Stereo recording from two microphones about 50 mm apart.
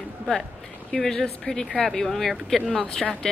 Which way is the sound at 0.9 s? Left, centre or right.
Centre.